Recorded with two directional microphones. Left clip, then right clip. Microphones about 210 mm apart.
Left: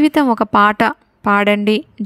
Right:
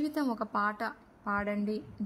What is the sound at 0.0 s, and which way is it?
A woman's voice, 50° left (ahead or behind).